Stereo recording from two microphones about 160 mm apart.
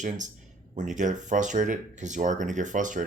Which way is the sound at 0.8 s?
50° right (ahead or behind).